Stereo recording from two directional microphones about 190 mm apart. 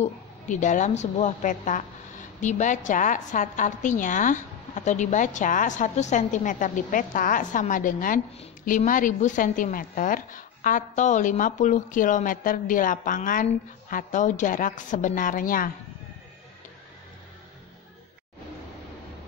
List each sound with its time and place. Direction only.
0.0 s a woman's voice: 40° left (ahead or behind)